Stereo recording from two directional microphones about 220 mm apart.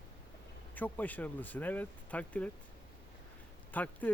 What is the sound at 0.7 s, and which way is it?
Speech, 10° left (ahead or behind).